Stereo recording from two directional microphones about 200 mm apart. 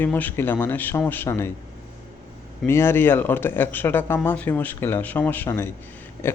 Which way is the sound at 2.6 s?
10° left (ahead or behind).